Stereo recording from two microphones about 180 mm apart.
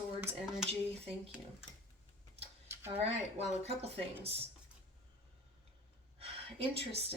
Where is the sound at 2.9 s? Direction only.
35° right (ahead or behind).